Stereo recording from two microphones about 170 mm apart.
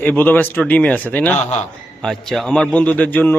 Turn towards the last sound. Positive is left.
turn(degrees=10)  # may be behind; listen again after turning